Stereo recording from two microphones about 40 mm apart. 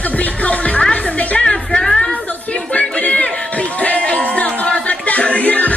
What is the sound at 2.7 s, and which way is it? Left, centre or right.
Music, left.